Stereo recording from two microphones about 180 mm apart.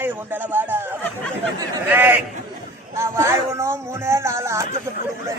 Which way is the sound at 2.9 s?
15° right (ahead or behind).